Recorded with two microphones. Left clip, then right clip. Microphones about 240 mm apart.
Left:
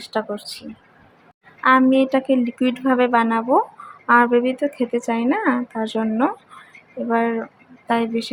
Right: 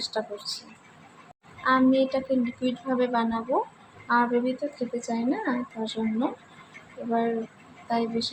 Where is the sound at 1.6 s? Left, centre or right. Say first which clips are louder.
Left 7 dB; left.